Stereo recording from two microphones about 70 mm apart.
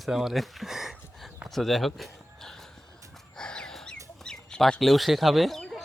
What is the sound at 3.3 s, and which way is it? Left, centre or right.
Chicken, centre.